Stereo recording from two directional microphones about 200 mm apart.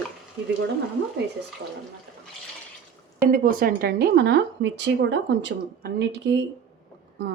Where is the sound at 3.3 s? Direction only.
45° right (ahead or behind).